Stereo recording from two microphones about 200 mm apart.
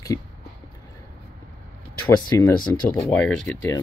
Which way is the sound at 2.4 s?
10° left (ahead or behind).